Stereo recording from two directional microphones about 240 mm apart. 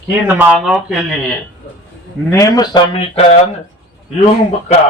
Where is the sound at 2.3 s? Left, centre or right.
Centre.